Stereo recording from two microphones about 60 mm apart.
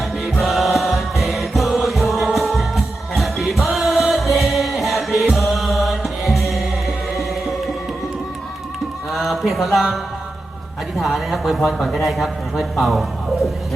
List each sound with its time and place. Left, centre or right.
0.2 s music: centre
9.1 s a sound: centre
10.9 s speech: centre